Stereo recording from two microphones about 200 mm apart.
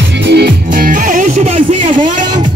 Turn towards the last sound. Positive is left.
turn(degrees=-25)  # may be behind; listen again after turning